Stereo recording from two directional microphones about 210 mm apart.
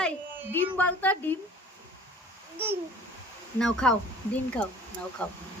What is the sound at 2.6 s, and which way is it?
Babbling, 10° right (ahead or behind).